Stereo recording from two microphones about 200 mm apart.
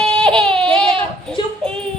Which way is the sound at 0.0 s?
5° left (ahead or behind).